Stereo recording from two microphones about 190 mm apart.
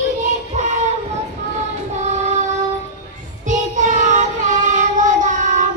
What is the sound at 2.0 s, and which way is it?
Child singing, 35° right (ahead or behind).